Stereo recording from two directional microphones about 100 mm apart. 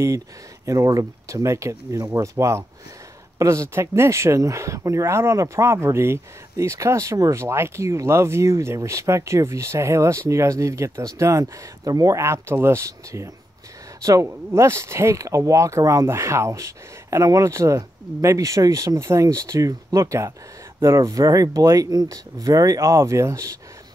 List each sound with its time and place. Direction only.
0.7 s speech: 35° right (ahead or behind)